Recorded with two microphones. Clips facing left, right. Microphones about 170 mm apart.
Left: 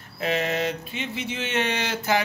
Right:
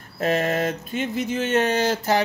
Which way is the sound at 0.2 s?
45° right (ahead or behind).